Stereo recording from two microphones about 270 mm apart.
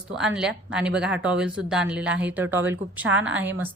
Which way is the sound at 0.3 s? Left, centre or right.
Centre.